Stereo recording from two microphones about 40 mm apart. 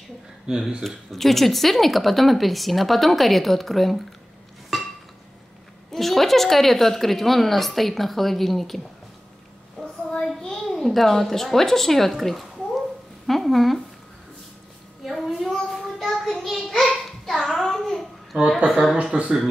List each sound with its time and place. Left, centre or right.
0.5 s speech: right
0.8 s speech: centre
4.7 s chink: centre
5.9 s speech: centre
9.8 s child singing: centre
10.4 s a sound: centre
10.8 s a woman's voice: centre
15.0 s a sound: centre
16.1 s a sound: centre
17.4 s child singing: centre
18.7 s speech: centre